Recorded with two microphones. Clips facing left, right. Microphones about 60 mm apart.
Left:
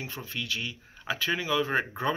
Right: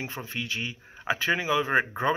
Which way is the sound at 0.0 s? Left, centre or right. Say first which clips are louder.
Right 2 dB; right.